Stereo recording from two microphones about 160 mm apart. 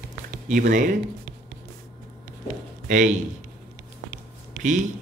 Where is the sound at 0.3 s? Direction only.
65° right (ahead or behind).